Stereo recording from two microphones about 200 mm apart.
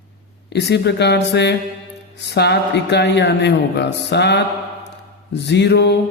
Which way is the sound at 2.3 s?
55° left (ahead or behind).